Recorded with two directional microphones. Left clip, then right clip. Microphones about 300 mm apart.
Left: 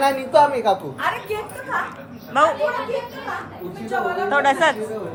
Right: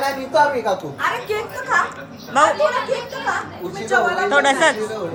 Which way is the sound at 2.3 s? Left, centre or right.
Centre.